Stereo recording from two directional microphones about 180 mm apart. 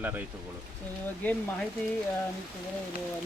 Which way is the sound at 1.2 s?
10° left (ahead or behind).